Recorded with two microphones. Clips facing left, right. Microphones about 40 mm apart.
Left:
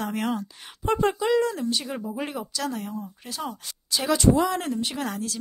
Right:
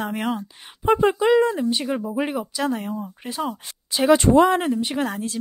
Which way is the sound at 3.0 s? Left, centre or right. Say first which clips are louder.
Right 6 dB; right.